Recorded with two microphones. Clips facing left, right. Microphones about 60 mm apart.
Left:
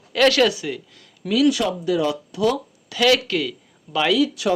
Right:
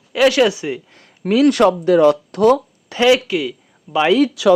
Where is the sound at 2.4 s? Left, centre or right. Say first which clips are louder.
Right 8 dB; right.